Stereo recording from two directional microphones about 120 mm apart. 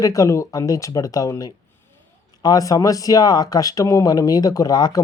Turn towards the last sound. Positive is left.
turn(degrees=35)  # may be behind; listen again after turning